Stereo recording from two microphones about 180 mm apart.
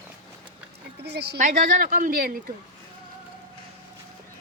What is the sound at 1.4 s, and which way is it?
Speech, 45° right (ahead or behind).